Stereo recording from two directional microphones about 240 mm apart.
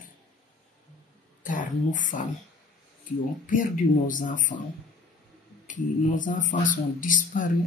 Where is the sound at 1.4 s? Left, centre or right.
Left.